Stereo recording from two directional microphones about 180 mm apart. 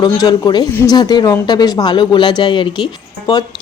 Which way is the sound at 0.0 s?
20° left (ahead or behind).